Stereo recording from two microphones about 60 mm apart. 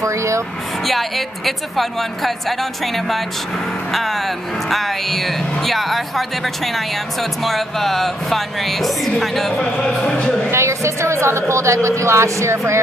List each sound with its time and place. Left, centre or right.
0.0 s vehicle: right
0.8 s speech: centre
10.5 s a woman's voice: right